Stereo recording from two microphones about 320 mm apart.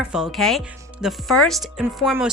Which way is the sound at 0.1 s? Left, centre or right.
Centre.